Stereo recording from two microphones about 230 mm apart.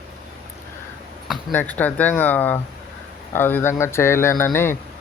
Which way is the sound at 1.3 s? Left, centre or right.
Centre.